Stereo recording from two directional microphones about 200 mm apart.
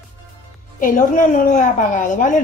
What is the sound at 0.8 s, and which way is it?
A woman's voice, 40° left (ahead or behind).